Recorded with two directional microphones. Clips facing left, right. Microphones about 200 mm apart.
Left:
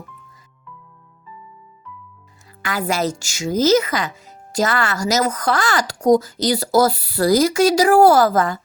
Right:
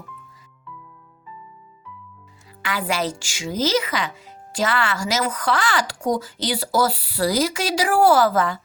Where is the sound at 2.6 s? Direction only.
45° left (ahead or behind).